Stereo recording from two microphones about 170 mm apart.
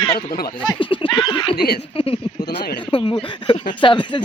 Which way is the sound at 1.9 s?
35° left (ahead or behind).